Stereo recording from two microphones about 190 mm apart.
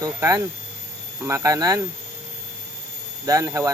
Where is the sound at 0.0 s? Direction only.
15° right (ahead or behind).